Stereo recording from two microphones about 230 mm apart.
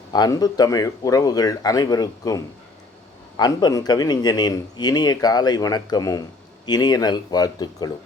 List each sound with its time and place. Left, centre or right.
0.1 s a man's voice: centre